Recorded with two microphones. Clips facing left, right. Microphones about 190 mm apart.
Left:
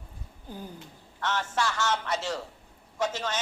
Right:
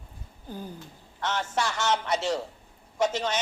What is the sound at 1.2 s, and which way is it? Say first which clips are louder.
A man's voice: right 1 dB; 20° right (ahead or behind).